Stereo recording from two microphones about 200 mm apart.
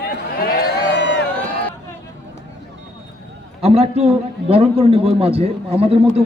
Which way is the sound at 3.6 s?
30° right (ahead or behind).